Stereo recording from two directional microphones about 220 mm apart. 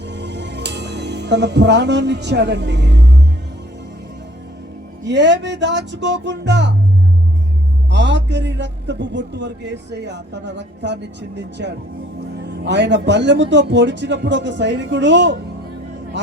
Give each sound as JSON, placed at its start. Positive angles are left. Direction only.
{"t": 0.0, "sound": "music", "side_deg": -50}
{"t": 5.0, "sound": "a man's voice", "side_deg": -55}
{"t": 7.9, "sound": "a man's voice", "side_deg": -55}